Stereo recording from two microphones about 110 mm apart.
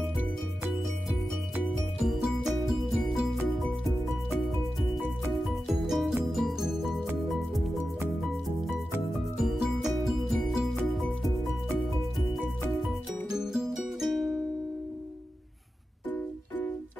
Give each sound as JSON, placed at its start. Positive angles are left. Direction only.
{"t": 1.7, "sound": "music", "side_deg": 0}
{"t": 5.4, "sound": "music", "side_deg": 0}
{"t": 12.8, "sound": "music", "side_deg": -5}
{"t": 16.1, "sound": "music", "side_deg": 15}